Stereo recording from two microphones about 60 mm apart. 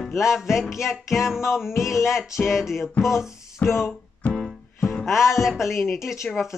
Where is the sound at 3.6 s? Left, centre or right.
Left.